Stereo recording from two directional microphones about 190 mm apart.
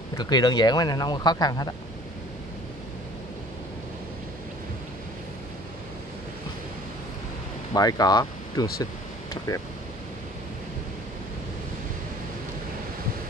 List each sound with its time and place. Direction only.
0.2 s speech: 20° left (ahead or behind)
7.7 s speech: 20° left (ahead or behind)